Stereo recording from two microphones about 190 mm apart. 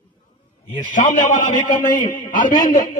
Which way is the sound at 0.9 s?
45° left (ahead or behind).